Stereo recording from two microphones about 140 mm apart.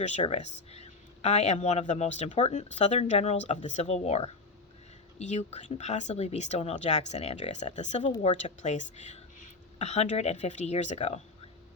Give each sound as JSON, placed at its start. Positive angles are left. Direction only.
{"t": 0.0, "sound": "speech", "side_deg": 55}